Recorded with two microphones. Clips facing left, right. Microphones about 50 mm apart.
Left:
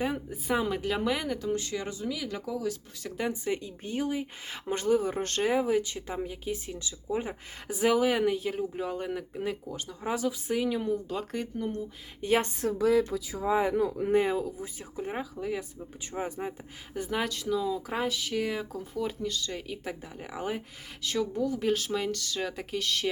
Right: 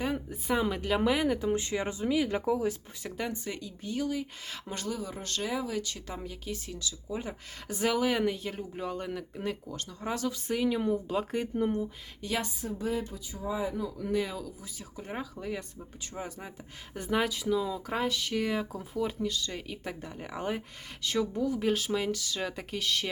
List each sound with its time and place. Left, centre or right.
0.0 s speech: centre
1.4 s speech: right
3.2 s speech: centre
3.6 s speech: left
7.7 s speech: centre
11.5 s speech: right
12.2 s speech: left
12.6 s speech: left
14.0 s speech: left
14.9 s speech: centre
16.1 s speech: left
16.5 s speech: centre